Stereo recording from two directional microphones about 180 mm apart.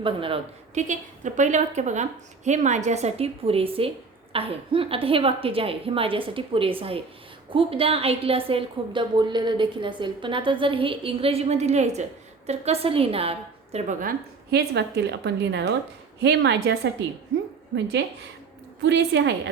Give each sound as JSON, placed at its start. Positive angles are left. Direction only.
{"t": 0.0, "sound": "speech", "side_deg": -30}
{"t": 13.7, "sound": "a woman's voice", "side_deg": -45}
{"t": 18.8, "sound": "a woman's voice", "side_deg": -75}